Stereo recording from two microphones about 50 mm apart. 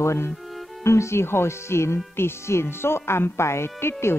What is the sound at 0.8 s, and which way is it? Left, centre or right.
A woman's voice, left.